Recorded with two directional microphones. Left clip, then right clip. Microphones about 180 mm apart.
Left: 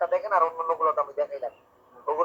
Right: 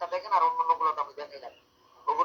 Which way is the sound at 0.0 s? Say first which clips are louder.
Left 3 dB; 20° left (ahead or behind).